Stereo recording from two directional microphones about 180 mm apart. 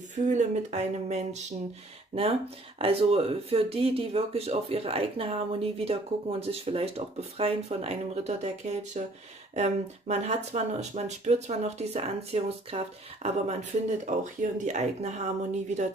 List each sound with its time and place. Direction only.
0.1 s speech: 40° right (ahead or behind)
2.8 s speech: 30° right (ahead or behind)